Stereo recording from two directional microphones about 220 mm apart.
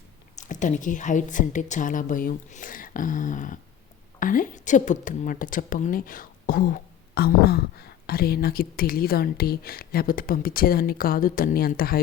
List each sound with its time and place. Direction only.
0.3 s a woman's voice: 35° left (ahead or behind)